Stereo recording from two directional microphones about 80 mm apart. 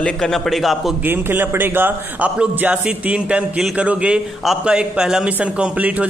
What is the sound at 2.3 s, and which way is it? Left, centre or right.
A man's voice, centre.